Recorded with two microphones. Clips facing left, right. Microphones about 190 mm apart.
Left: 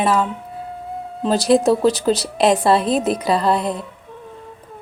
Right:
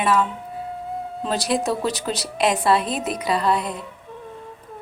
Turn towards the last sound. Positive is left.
turn(degrees=30)  # may be behind; listen again after turning